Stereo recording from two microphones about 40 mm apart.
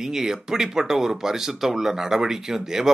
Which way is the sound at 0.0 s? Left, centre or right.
Centre.